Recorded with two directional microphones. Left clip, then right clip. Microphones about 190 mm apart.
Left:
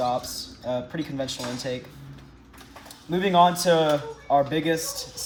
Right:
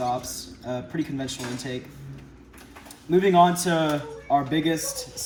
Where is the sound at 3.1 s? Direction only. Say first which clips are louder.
Right 1 dB; 20° left (ahead or behind).